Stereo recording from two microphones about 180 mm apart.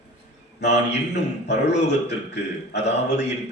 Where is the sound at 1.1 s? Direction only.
70° left (ahead or behind).